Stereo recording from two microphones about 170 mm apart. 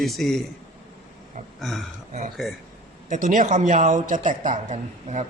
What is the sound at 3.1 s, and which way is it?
Speech, 50° right (ahead or behind).